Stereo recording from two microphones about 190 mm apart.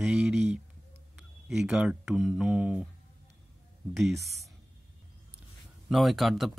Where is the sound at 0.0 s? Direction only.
Centre (ahead or behind).